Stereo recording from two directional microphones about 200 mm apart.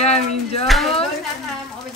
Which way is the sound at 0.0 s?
30° left (ahead or behind).